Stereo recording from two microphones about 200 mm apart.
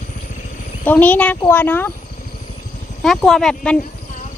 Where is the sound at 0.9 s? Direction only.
10° left (ahead or behind).